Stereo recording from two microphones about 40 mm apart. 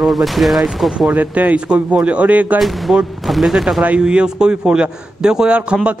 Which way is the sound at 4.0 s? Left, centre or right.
Right.